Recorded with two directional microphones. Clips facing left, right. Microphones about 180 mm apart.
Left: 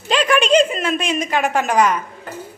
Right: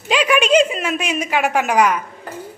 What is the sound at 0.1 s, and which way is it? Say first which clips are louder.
A woman's voice: even; 10° right (ahead or behind).